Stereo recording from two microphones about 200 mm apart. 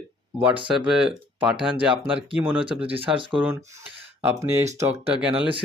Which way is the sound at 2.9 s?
25° right (ahead or behind).